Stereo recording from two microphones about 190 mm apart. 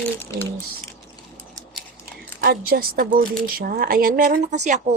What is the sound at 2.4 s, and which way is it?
Speech, 50° right (ahead or behind).